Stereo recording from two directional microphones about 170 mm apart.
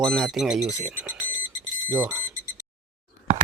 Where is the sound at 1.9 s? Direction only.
15° right (ahead or behind).